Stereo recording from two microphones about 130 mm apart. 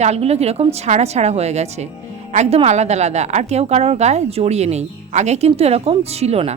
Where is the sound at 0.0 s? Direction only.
55° right (ahead or behind).